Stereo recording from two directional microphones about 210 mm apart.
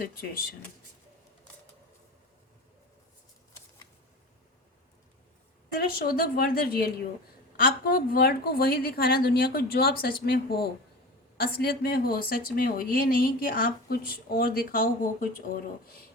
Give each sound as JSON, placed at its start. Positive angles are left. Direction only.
{"t": 5.8, "sound": "speech", "side_deg": 45}